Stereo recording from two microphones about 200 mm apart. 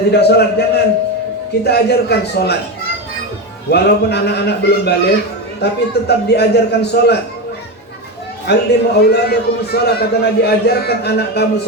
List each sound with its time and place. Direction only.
0.1 s a man's voice: 55° left (ahead or behind)
3.7 s a man's voice: 55° left (ahead or behind)
8.4 s a man's voice: 55° left (ahead or behind)